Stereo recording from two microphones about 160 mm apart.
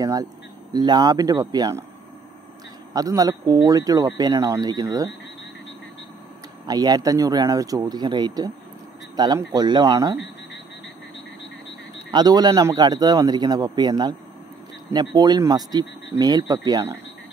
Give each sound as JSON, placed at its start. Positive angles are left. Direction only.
{"t": 0.0, "sound": "speech", "side_deg": -25}
{"t": 2.9, "sound": "speech", "side_deg": -25}
{"t": 6.6, "sound": "speech", "side_deg": -25}
{"t": 12.1, "sound": "speech", "side_deg": -25}
{"t": 15.1, "sound": "speech", "side_deg": -25}